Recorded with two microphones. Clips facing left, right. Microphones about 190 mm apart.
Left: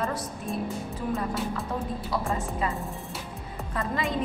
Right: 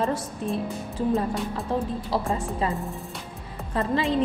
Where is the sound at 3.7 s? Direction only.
30° right (ahead or behind).